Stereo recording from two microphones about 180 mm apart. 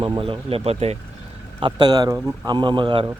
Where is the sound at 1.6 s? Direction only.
25° right (ahead or behind).